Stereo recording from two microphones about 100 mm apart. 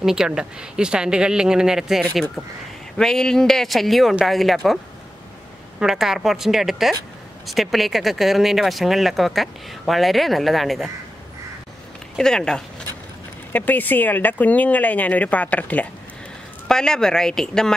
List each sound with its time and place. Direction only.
0.0 s speech: 5° right (ahead or behind)
5.8 s speech: 5° right (ahead or behind)
12.2 s speech: 5° left (ahead or behind)
13.5 s speech: 15° left (ahead or behind)